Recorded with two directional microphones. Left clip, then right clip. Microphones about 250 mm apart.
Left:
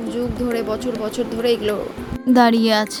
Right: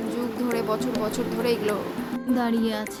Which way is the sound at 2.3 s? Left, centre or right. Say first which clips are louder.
Left 12 dB; left.